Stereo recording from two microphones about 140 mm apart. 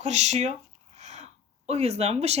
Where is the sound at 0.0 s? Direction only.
55° right (ahead or behind).